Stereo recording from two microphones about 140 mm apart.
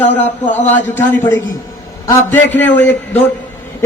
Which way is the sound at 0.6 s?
60° left (ahead or behind).